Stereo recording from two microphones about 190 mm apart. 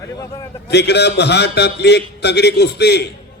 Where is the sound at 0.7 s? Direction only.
60° left (ahead or behind).